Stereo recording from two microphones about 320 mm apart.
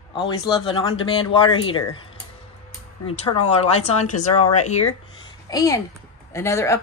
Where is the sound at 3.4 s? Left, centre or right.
Centre.